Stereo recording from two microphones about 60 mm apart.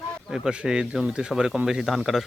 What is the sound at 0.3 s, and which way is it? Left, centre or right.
Speech, centre.